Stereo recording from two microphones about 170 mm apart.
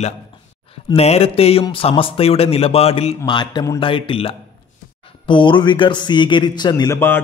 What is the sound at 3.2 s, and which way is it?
A man's voice, 25° left (ahead or behind).